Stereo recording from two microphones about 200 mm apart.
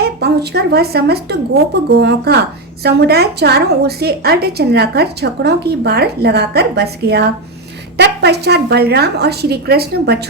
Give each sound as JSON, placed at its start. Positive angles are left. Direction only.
{"t": 0.0, "sound": "a woman's voice", "side_deg": -55}